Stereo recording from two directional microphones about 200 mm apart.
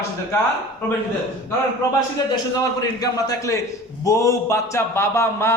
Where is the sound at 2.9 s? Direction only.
15° left (ahead or behind).